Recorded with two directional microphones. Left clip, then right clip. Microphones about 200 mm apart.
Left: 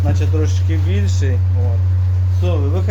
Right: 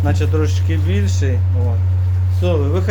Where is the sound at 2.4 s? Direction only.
45° right (ahead or behind).